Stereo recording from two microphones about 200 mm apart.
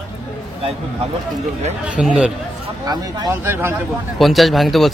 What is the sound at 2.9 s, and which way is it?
Speech, 20° right (ahead or behind).